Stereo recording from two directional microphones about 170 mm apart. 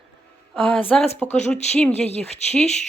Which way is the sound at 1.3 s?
40° left (ahead or behind).